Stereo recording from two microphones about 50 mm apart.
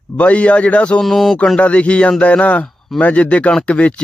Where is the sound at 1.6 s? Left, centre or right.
Left.